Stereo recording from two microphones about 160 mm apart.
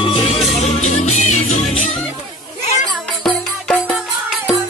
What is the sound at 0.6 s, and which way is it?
Music, 45° left (ahead or behind).